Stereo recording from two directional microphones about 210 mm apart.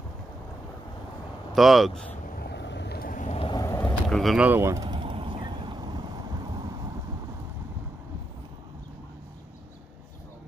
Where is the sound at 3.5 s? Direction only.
15° left (ahead or behind); by 6.0 s 20° right (ahead or behind).